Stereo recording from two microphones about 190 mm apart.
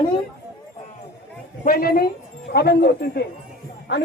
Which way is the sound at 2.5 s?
60° left (ahead or behind).